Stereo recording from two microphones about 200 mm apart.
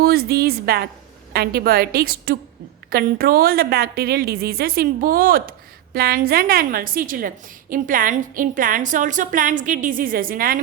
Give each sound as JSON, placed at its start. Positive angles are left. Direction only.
{"t": 0.0, "sound": "a woman's voice", "side_deg": -50}